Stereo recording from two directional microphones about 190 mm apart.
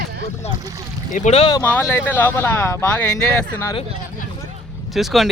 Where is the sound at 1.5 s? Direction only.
15° left (ahead or behind).